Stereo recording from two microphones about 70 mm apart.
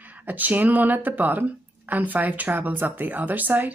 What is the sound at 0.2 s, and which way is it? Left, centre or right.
A woman's voice, right.